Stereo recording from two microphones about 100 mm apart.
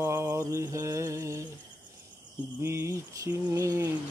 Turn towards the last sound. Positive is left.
turn(degrees=-30)  # may be behind; listen again after turning